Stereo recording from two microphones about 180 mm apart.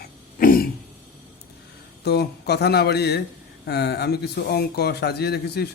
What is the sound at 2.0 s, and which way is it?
A man's voice, 65° left (ahead or behind).